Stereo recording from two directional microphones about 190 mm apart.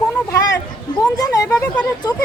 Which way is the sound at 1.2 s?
20° left (ahead or behind).